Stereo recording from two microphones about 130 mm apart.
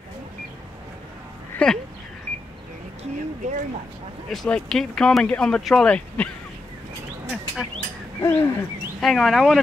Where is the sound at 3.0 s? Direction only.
65° right (ahead or behind).